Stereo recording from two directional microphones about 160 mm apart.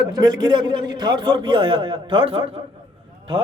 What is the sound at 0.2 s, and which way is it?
A man's voice, 25° right (ahead or behind).